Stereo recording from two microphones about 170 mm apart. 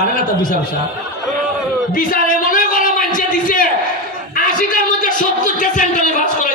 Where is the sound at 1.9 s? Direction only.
55° left (ahead or behind).